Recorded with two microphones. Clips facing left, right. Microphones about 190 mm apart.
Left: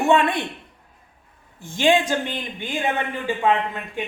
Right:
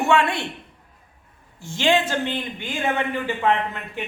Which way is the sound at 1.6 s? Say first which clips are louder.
Left 2 dB; 15° left (ahead or behind).